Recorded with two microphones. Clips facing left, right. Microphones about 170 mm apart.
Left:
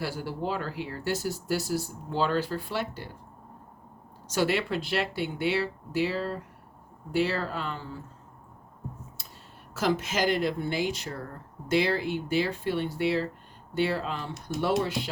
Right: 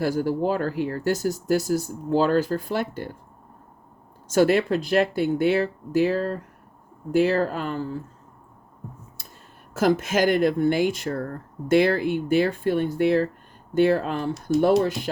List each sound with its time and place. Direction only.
0.0 s speech: 45° right (ahead or behind)
4.3 s speech: 45° right (ahead or behind)
9.7 s speech: 50° right (ahead or behind)